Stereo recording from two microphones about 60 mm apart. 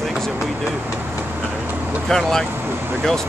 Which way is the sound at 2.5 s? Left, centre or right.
Right.